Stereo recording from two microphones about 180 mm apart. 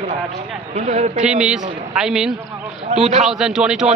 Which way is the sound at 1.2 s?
5° right (ahead or behind).